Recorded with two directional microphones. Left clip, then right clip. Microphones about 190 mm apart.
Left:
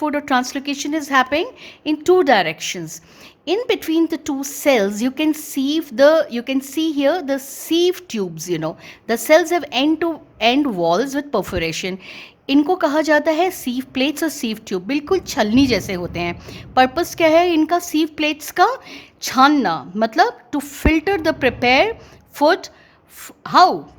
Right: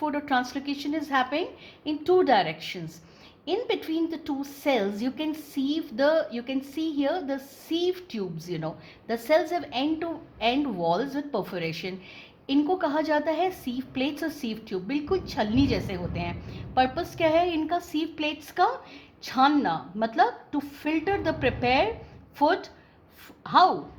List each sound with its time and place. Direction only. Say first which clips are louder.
0.0 s a woman's voice: left 8 dB; 50° left (ahead or behind)